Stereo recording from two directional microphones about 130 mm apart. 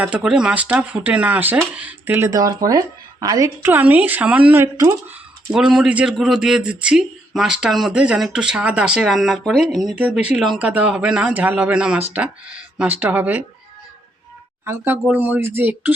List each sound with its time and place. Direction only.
0.0 s speech: 5° right (ahead or behind)
2.3 s speech: 25° right (ahead or behind)
3.6 s speech: 15° right (ahead or behind)
5.5 s a man's voice: 5° right (ahead or behind)
14.6 s speech: 20° right (ahead or behind)